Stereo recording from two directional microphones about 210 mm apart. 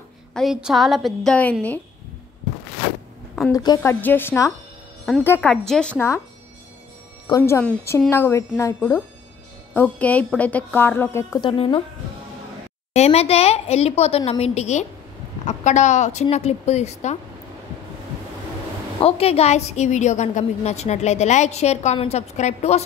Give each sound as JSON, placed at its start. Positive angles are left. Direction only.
{"t": 0.3, "sound": "a woman's voice", "side_deg": 0}
{"t": 3.5, "sound": "a woman's voice", "side_deg": 15}
{"t": 7.2, "sound": "a woman's voice", "side_deg": 15}
{"t": 12.9, "sound": "a woman's voice", "side_deg": 30}
{"t": 18.9, "sound": "a woman's voice", "side_deg": 30}